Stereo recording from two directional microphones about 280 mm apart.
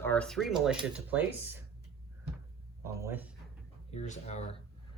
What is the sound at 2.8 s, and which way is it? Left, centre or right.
Speech, centre.